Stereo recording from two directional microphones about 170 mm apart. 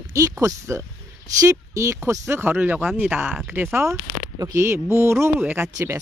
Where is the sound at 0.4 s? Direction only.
15° right (ahead or behind).